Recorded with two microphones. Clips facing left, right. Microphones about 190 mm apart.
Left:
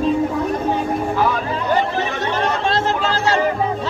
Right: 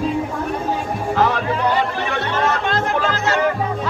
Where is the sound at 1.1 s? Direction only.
75° right (ahead or behind).